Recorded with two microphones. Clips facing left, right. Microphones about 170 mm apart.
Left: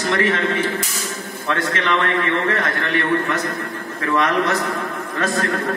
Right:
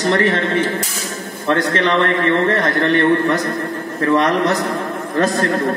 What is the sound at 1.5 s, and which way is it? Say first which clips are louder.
A man's voice: right 5 dB; 35° right (ahead or behind).